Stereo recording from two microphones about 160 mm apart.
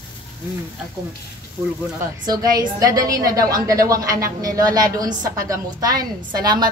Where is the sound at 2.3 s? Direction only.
25° right (ahead or behind).